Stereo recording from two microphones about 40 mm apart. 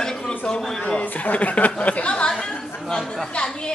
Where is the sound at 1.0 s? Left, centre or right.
Left.